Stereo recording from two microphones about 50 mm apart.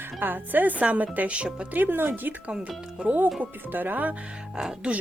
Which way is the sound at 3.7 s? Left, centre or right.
Right.